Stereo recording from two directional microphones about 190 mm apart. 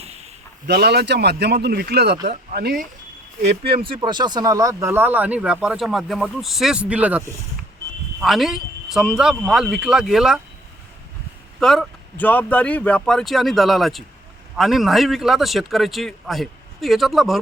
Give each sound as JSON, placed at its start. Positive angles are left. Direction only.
{"t": 0.7, "sound": "speech", "side_deg": -55}
{"t": 3.4, "sound": "a man's voice", "side_deg": -30}
{"t": 11.6, "sound": "a man's voice", "side_deg": 5}